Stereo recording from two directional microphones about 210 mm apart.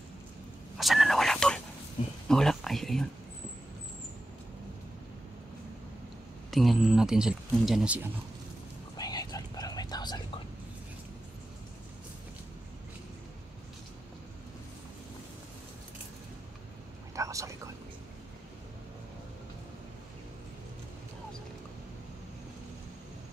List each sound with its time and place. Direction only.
0.7 s whispering: centre (ahead or behind)
2.2 s a sound: centre (ahead or behind)
6.5 s speech: centre (ahead or behind)
8.9 s whispering: 20° left (ahead or behind)
17.1 s whispering: 15° right (ahead or behind)